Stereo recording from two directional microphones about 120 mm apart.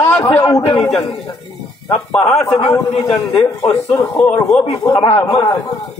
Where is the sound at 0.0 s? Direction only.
20° left (ahead or behind).